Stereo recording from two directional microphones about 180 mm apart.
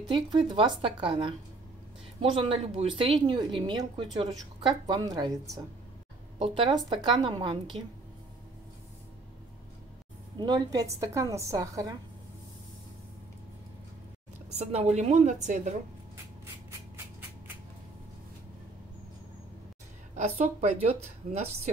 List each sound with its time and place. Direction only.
0.1 s a woman's voice: 25° right (ahead or behind)
10.4 s a woman's voice: 25° right (ahead or behind)
14.6 s a woman's voice: 35° right (ahead or behind)
20.2 s a woman's voice: 40° right (ahead or behind)